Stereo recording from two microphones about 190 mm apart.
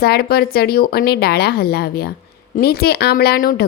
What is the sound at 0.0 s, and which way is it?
A woman's voice, 55° left (ahead or behind).